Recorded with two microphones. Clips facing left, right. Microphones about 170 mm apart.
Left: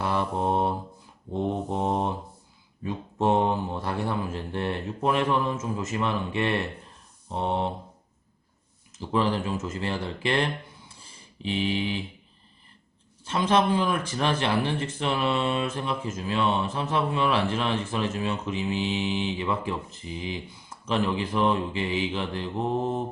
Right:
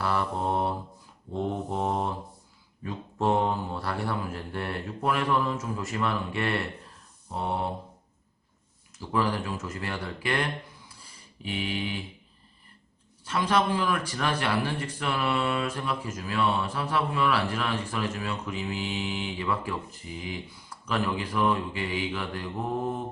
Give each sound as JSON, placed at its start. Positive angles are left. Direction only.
{"t": 0.0, "sound": "mantra", "side_deg": 20}
{"t": 2.8, "sound": "speech", "side_deg": 20}
{"t": 9.0, "sound": "speech", "side_deg": 20}
{"t": 13.2, "sound": "speech", "side_deg": 25}